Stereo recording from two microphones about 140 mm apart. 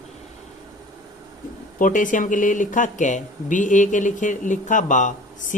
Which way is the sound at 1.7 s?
70° left (ahead or behind).